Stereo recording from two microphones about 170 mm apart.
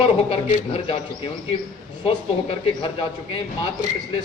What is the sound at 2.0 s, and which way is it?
Speech, 35° left (ahead or behind).